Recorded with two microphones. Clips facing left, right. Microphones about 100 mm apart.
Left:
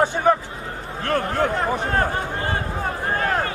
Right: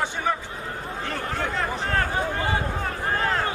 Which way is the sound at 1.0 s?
60° left (ahead or behind).